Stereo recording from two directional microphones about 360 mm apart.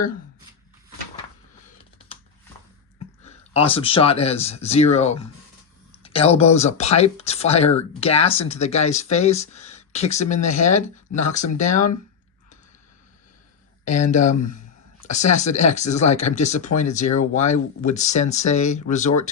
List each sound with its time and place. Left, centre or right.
3.2 s speech: centre
13.8 s speech: centre
14.3 s speech: left
15.0 s speech: centre